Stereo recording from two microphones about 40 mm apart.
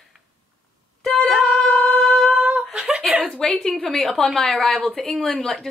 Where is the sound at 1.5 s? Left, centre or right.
Centre.